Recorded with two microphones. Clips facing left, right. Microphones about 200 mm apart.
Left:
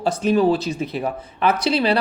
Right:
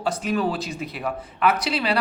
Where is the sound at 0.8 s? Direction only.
40° left (ahead or behind).